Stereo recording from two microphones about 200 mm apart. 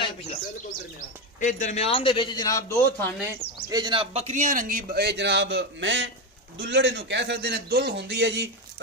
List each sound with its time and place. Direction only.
0.0 s speech: 30° left (ahead or behind)
1.4 s a man's voice: 40° left (ahead or behind); by 3.1 s 15° left (ahead or behind)
3.2 s a man's voice: 15° right (ahead or behind); by 8.8 s 60° right (ahead or behind)